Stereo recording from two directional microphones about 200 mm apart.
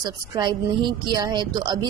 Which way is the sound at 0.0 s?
20° right (ahead or behind).